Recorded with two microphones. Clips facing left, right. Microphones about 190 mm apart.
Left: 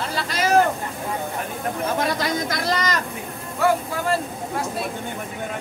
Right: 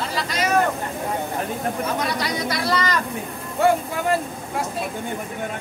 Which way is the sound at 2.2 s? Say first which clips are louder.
Even; 50° left (ahead or behind).